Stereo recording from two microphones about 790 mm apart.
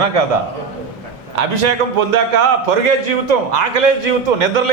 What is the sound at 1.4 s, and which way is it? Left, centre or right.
A man's voice, right.